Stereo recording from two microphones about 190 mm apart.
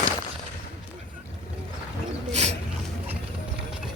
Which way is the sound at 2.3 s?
35° right (ahead or behind).